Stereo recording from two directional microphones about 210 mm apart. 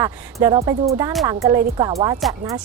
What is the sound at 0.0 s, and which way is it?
A woman's voice, 15° right (ahead or behind).